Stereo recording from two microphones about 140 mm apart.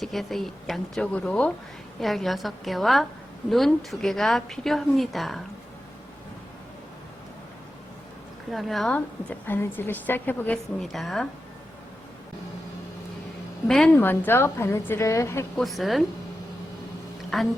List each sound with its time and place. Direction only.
0.0 s a woman's voice: centre (ahead or behind)
8.4 s a woman's voice: centre (ahead or behind)
8.9 s a woman's voice: 10° left (ahead or behind)
13.7 s a woman's voice: 5° left (ahead or behind); by 15.4 s 20° left (ahead or behind)
15.5 s a woman's voice: centre (ahead or behind)
17.3 s a woman's voice: centre (ahead or behind)